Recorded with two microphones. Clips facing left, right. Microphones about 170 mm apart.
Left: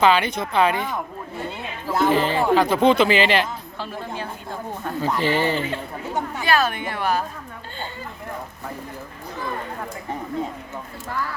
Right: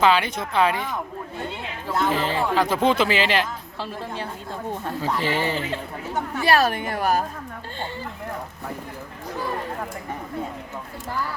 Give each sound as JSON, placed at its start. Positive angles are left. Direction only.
{"t": 0.0, "sound": "speech", "side_deg": 0}
{"t": 5.0, "sound": "speech", "side_deg": -5}
{"t": 6.4, "sound": "a woman's voice", "side_deg": -35}